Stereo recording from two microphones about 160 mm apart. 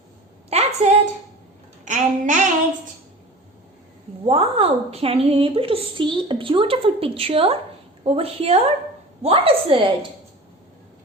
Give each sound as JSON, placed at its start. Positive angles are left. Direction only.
{"t": 0.5, "sound": "a sound", "side_deg": -40}
{"t": 1.8, "sound": "a child's voice", "side_deg": -50}
{"t": 4.3, "sound": "a woman's voice", "side_deg": -35}